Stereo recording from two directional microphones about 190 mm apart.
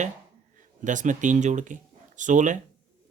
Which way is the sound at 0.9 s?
40° right (ahead or behind).